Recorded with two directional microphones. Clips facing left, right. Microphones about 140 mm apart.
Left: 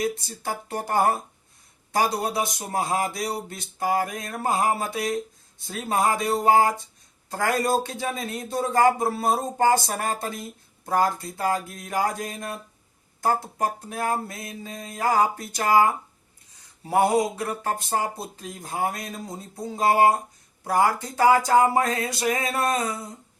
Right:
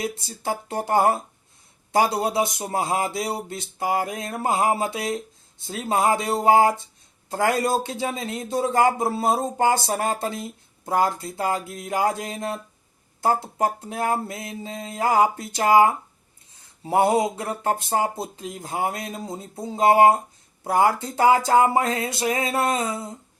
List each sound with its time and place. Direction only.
0.0 s speech: 25° right (ahead or behind)